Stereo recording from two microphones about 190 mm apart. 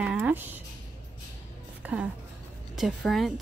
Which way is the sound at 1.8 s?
5° right (ahead or behind).